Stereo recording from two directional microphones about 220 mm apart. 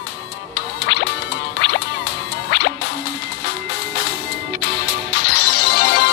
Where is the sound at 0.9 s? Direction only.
55° left (ahead or behind).